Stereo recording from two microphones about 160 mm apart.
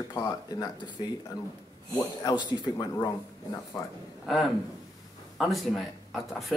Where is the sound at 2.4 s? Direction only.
25° left (ahead or behind).